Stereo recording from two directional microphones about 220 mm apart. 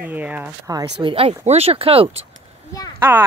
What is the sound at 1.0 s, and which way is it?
Speech, 25° right (ahead or behind).